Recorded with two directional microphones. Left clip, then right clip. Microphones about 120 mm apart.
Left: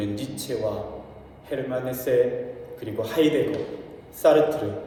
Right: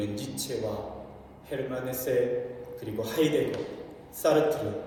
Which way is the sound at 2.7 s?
50° left (ahead or behind).